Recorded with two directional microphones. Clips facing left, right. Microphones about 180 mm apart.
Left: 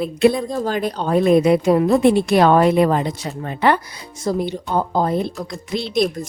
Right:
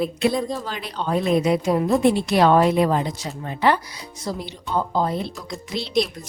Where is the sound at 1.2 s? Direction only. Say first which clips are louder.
Left 6 dB; 55° left (ahead or behind).